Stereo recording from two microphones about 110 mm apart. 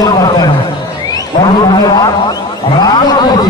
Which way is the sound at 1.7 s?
35° left (ahead or behind).